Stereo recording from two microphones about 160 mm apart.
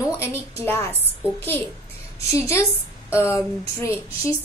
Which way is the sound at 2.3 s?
20° left (ahead or behind).